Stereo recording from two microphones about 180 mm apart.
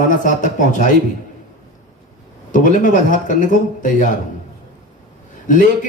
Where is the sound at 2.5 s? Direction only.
45° left (ahead or behind).